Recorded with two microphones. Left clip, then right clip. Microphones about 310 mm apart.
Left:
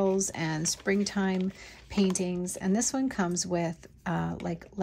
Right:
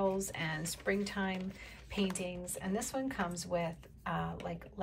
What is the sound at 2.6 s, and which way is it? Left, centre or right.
Speech, left.